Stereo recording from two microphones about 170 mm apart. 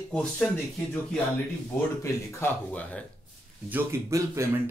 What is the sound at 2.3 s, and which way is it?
Speech, 10° left (ahead or behind).